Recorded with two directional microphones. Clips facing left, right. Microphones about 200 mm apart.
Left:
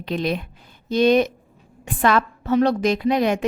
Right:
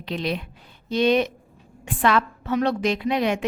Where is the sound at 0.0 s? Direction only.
50° left (ahead or behind).